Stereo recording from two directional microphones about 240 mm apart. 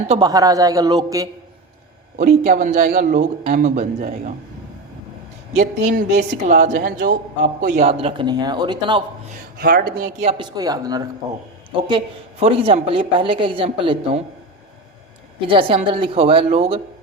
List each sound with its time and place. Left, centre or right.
0.1 s a man's voice: centre
2.1 s speech: right
5.5 s speech: right
9.6 s speech: right
15.4 s speech: right